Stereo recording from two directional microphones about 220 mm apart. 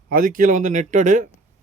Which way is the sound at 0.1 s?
40° right (ahead or behind).